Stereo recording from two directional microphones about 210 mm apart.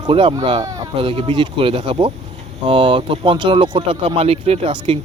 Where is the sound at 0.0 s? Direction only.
25° right (ahead or behind).